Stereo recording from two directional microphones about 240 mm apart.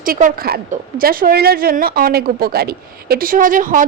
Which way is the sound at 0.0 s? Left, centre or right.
Right.